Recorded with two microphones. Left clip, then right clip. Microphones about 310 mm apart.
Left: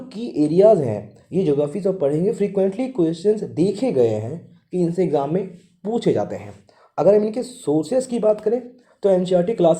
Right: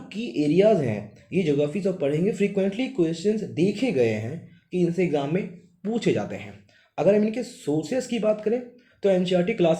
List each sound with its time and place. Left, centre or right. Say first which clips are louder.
0.1 s speech: left 3 dB; centre